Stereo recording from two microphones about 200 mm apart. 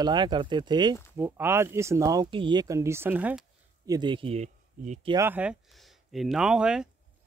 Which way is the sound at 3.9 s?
25° right (ahead or behind).